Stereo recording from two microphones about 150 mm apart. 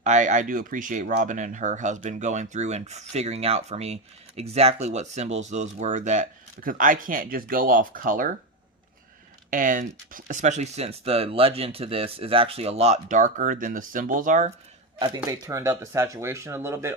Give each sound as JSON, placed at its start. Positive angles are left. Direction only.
{"t": 0.0, "sound": "speech", "side_deg": -55}
{"t": 9.5, "sound": "speech", "side_deg": -65}
{"t": 14.9, "sound": "speech", "side_deg": -30}